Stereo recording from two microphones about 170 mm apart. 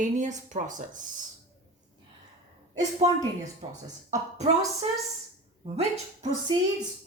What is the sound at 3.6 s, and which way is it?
Speech, 35° right (ahead or behind).